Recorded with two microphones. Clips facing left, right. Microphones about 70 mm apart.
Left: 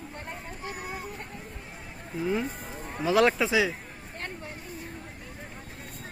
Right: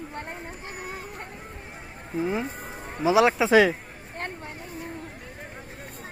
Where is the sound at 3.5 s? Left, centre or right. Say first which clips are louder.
Right 8 dB; right.